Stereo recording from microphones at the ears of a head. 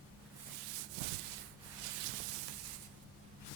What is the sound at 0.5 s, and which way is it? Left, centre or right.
Rub, right.